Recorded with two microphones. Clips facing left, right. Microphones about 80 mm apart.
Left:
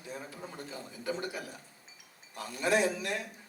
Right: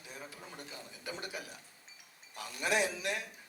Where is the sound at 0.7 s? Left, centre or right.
Left.